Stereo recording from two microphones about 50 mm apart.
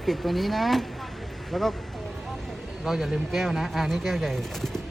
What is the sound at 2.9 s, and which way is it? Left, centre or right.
Speech, centre.